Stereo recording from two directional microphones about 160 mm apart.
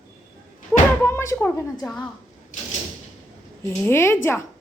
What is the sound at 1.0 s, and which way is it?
Speech, 15° left (ahead or behind).